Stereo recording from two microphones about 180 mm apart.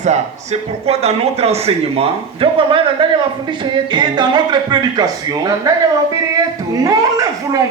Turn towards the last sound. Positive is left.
turn(degrees=-20)  # may be behind; listen again after turning